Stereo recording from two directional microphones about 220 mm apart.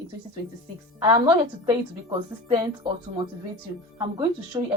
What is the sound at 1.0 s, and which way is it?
A woman's voice, 20° right (ahead or behind).